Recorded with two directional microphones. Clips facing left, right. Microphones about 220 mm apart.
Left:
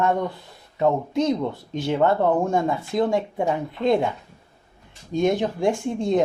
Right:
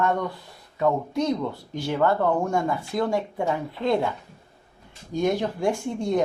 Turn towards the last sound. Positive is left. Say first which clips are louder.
# left 3 dB
turn(degrees=20)  # may be behind; listen again after turning